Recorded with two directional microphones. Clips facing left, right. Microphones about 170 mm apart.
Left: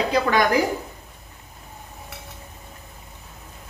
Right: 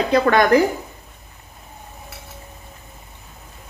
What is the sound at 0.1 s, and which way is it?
Speech, 55° right (ahead or behind).